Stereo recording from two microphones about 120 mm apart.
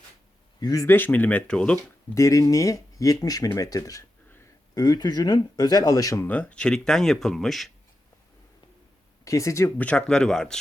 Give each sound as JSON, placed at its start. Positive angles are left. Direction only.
{"t": 0.6, "sound": "speech", "side_deg": 30}
{"t": 0.9, "sound": "speech", "side_deg": 15}
{"t": 2.1, "sound": "speech", "side_deg": 25}
{"t": 6.2, "sound": "speech", "side_deg": 10}
{"t": 9.2, "sound": "speech", "side_deg": 25}
{"t": 9.7, "sound": "speech", "side_deg": 10}